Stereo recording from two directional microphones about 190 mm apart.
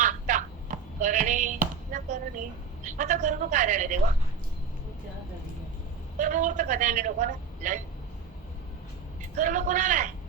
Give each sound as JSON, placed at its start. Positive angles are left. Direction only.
{"t": 0.0, "sound": "a sound", "side_deg": -40}
{"t": 2.8, "sound": "speech", "side_deg": -40}
{"t": 6.1, "sound": "speech", "side_deg": -40}
{"t": 9.3, "sound": "speech", "side_deg": -40}